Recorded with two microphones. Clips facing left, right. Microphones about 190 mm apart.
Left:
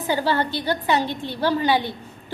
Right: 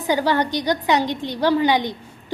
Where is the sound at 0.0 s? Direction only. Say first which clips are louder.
Right 2 dB; 15° right (ahead or behind).